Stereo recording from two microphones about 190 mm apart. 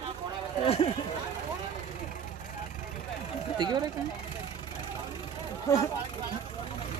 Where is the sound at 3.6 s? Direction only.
20° right (ahead or behind).